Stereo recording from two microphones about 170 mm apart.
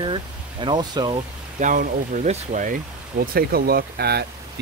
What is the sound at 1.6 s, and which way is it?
Speech, 50° right (ahead or behind).